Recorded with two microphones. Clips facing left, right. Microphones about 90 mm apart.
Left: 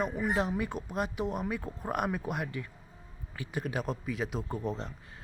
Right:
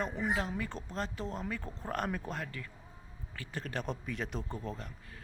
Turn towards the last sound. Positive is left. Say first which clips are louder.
# left 6 dB
turn(degrees=20)  # may be behind; listen again after turning